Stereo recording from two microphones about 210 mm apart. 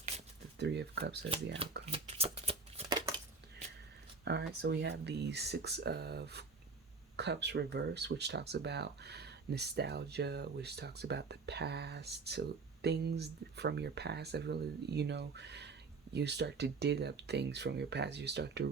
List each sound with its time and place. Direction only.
0.6 s speech: 55° right (ahead or behind)
1.9 s shuffling cards: 30° right (ahead or behind)
4.3 s speech: 55° right (ahead or behind)